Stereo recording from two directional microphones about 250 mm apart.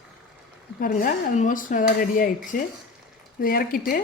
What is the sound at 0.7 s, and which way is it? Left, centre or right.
Speech, left.